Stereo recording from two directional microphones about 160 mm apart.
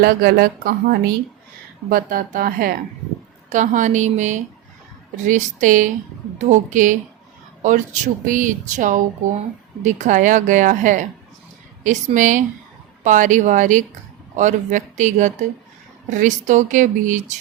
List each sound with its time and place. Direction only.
0.0 s a woman's voice: 70° right (ahead or behind)
3.5 s speech: 50° right (ahead or behind)